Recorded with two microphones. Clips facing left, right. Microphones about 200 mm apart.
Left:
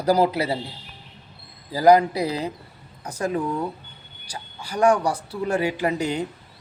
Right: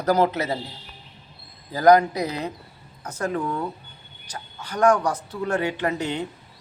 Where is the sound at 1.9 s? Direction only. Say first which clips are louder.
Even; 30° left (ahead or behind).